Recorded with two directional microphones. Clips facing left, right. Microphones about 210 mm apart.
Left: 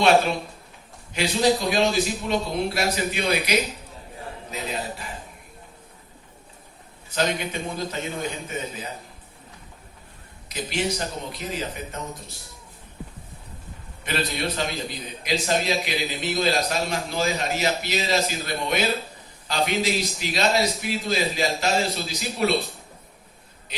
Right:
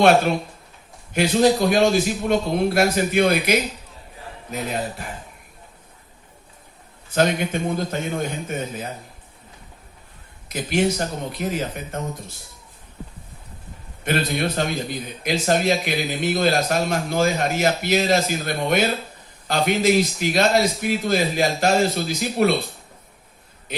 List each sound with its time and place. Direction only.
1.1 s a man's voice: 50° right (ahead or behind)
7.1 s a man's voice: 50° right (ahead or behind)
10.5 s a man's voice: 50° right (ahead or behind)
14.0 s a man's voice: 50° right (ahead or behind)